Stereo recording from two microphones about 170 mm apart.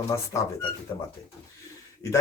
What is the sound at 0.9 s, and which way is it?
Speech, 20° left (ahead or behind).